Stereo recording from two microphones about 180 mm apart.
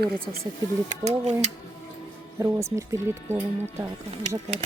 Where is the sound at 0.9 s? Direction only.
40° right (ahead or behind).